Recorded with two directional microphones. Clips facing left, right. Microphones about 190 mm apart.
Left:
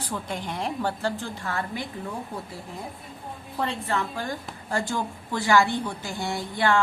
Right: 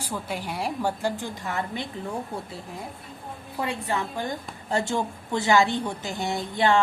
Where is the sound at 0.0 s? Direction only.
10° right (ahead or behind).